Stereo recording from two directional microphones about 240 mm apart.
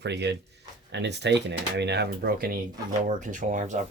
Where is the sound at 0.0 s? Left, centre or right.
Right.